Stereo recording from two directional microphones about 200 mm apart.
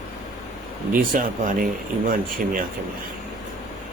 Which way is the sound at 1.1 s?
40° right (ahead or behind).